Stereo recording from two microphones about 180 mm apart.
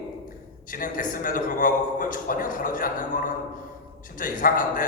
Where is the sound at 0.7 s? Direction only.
50° left (ahead or behind).